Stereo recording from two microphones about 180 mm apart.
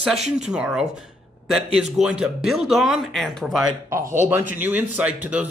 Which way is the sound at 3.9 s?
15° right (ahead or behind).